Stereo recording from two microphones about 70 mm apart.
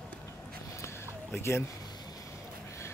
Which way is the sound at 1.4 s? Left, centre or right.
Left.